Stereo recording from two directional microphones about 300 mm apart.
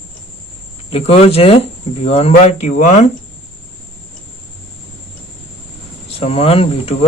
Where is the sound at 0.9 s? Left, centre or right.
Centre.